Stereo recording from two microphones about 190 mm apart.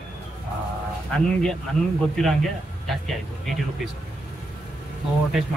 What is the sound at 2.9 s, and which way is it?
A man's voice, centre (ahead or behind).